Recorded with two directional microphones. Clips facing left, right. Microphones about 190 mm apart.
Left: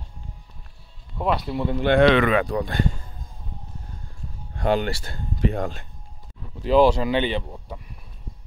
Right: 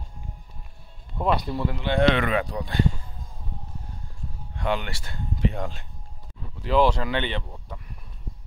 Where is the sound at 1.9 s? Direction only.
85° left; by 2.9 s 50° left (ahead or behind).